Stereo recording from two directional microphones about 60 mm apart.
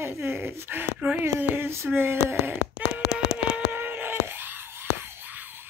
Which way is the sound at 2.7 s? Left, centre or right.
Centre.